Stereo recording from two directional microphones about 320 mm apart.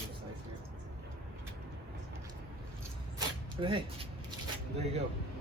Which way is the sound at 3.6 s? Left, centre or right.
Centre.